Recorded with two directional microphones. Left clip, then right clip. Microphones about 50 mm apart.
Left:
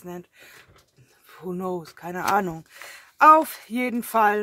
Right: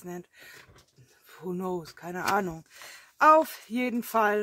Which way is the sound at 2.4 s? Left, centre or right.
Left.